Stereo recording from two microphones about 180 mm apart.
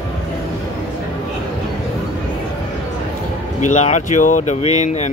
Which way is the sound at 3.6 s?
40° left (ahead or behind).